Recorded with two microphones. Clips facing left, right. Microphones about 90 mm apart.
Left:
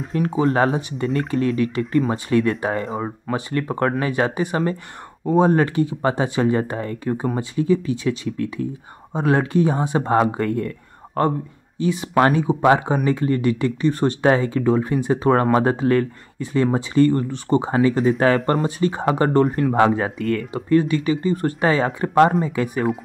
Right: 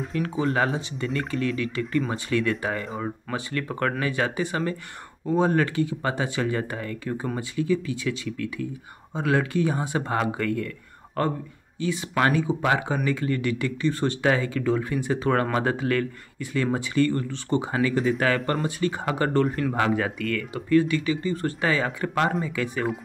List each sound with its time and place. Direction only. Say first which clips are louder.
0.1 s speech: left 7 dB; 40° left (ahead or behind)